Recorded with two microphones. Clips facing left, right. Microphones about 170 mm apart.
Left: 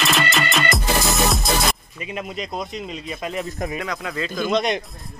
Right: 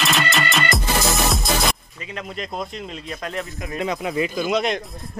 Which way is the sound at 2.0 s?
15° left (ahead or behind).